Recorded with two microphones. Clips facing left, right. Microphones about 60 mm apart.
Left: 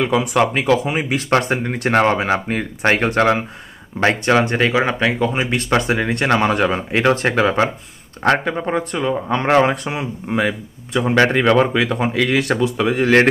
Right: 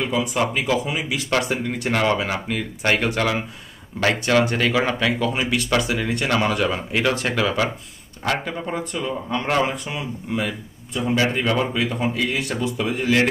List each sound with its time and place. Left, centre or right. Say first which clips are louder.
0.0 s speech: left 6 dB; left
4.0 s speech: left 3 dB; left
8.2 s speech: left 7 dB; left